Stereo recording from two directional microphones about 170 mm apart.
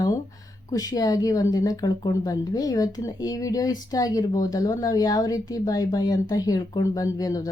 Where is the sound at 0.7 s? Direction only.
20° left (ahead or behind).